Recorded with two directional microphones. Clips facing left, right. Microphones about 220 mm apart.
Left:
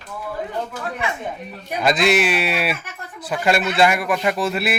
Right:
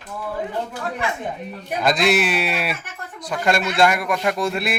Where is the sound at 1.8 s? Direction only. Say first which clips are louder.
Left 1 dB; centre (ahead or behind).